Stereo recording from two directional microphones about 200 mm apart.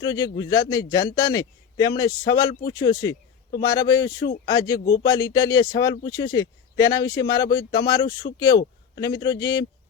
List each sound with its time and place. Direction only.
0.0 s speech: 20° left (ahead or behind)
3.5 s a man's voice: 50° left (ahead or behind)
3.8 s speech: 15° left (ahead or behind)
4.8 s a man's voice: 45° left (ahead or behind)
5.1 s speech: 15° left (ahead or behind)